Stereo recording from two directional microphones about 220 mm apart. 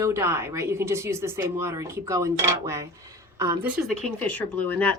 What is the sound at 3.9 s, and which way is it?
Speech, 5° left (ahead or behind).